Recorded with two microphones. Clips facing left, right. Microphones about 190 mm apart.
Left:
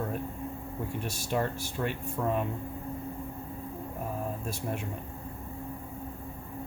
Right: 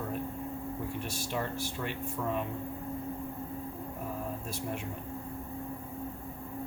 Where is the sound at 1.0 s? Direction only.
45° left (ahead or behind).